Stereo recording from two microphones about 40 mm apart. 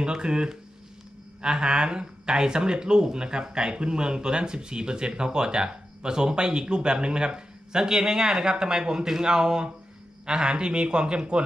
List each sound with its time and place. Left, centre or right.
0.0 s speech: right